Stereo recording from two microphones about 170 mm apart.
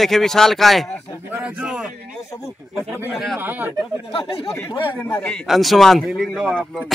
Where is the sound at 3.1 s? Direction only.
Centre (ahead or behind).